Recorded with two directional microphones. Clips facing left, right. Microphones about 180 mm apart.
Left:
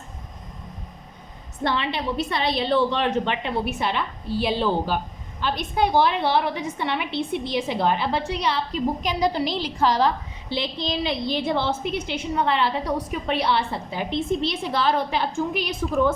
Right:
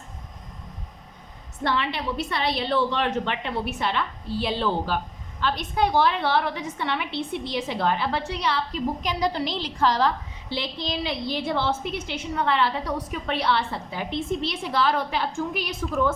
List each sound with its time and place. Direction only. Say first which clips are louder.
1.6 s a woman's voice: left 1 dB; 20° left (ahead or behind)